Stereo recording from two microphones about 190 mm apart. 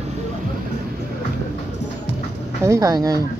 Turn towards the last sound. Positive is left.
turn(degrees=-20)  # may be behind; listen again after turning